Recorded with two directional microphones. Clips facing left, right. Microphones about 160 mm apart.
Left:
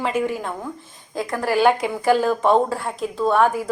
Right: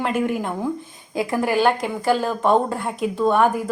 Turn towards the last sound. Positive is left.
turn(degrees=-5)  # may be behind; listen again after turning